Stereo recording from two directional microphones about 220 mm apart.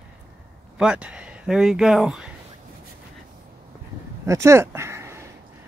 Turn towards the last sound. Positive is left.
turn(degrees=-10)  # may be behind; listen again after turning